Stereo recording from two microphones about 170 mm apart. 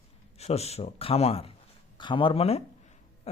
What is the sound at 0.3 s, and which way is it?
Speech, 40° left (ahead or behind).